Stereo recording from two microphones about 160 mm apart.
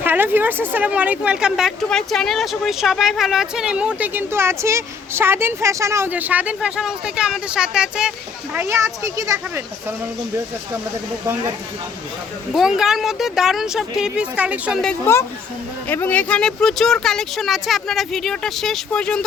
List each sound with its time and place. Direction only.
0.0 s speech: 10° right (ahead or behind)
8.5 s speech: 15° right (ahead or behind)
12.5 s speech: 5° right (ahead or behind)
15.1 s speech: 15° left (ahead or behind)